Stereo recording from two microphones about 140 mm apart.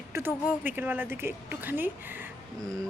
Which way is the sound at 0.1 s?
15° right (ahead or behind).